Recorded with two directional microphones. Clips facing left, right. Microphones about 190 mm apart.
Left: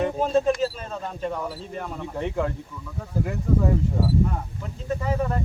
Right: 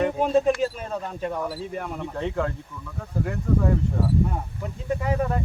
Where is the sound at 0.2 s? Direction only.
15° right (ahead or behind).